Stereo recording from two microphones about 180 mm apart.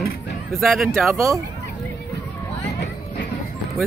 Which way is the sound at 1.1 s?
15° right (ahead or behind).